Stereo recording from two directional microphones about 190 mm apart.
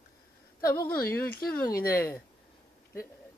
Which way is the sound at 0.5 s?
20° left (ahead or behind).